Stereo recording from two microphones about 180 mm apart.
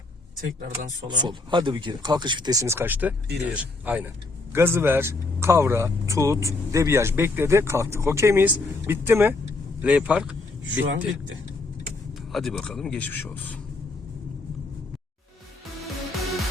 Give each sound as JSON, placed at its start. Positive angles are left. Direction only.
{"t": 1.0, "sound": "speech", "side_deg": -25}
{"t": 10.6, "sound": "a man's voice", "side_deg": -90}
{"t": 12.3, "sound": "speech", "side_deg": 0}